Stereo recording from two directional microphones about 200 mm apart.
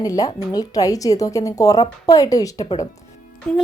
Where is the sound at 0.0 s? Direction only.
20° left (ahead or behind).